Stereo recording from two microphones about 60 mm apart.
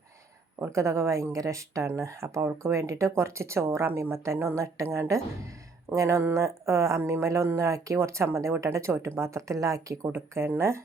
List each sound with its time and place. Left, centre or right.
0.6 s speech: right
1.9 s speech: right
10.1 s speech: right